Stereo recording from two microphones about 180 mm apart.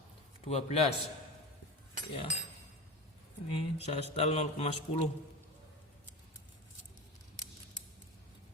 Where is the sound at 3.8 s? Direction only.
35° left (ahead or behind).